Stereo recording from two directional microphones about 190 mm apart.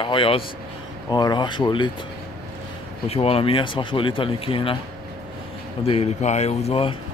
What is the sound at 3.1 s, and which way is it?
Speech, 30° left (ahead or behind).